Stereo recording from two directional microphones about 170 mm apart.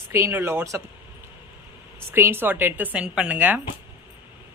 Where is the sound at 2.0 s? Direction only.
15° right (ahead or behind).